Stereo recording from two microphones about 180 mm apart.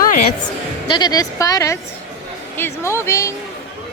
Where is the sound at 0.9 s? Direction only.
25° left (ahead or behind).